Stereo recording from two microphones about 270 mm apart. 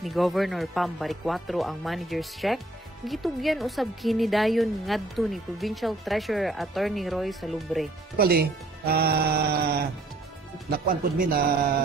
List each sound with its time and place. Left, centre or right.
0.0 s speech: centre
8.2 s speech: right
10.9 s speech: right